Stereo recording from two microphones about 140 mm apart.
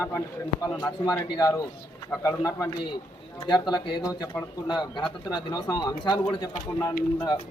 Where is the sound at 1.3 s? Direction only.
25° left (ahead or behind).